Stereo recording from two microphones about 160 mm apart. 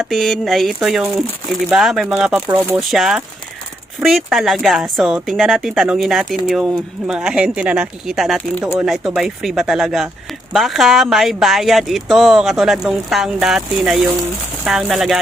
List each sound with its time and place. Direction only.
0.0 s speech: centre (ahead or behind)